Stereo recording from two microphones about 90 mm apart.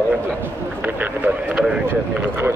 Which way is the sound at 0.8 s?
20° right (ahead or behind).